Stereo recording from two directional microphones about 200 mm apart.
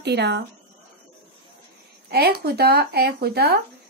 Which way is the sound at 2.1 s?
50° right (ahead or behind).